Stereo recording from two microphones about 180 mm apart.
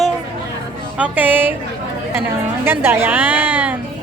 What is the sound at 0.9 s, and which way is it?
Speech, 10° right (ahead or behind).